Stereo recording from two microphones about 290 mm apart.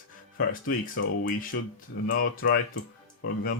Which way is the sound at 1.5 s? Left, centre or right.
Left.